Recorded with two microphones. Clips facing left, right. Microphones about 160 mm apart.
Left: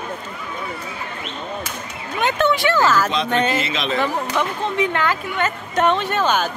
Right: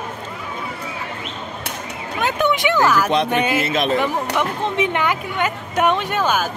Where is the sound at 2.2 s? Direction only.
15° right (ahead or behind).